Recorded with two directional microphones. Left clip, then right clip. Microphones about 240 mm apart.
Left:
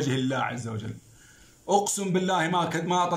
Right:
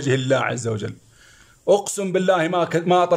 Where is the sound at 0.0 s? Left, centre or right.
Right.